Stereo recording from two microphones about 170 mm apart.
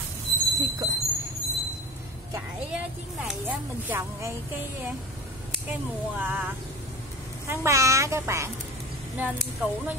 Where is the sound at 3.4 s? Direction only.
10° right (ahead or behind).